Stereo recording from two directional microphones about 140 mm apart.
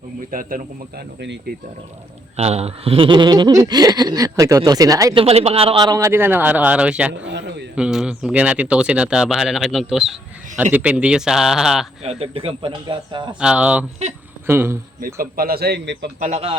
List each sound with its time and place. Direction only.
0.3 s speech: 80° right
2.3 s speech: 50° right (ahead or behind); by 5.1 s 25° right (ahead or behind)
5.1 s a man's voice: 45° right (ahead or behind)
5.9 s a man's voice: 20° right (ahead or behind); by 11.9 s 5° right (ahead or behind)
12.0 s speech: 45° right (ahead or behind)
13.4 s a man's voice: 5° right (ahead or behind)
15.0 s speech: 90° right
16.2 s a man's voice: 50° right (ahead or behind)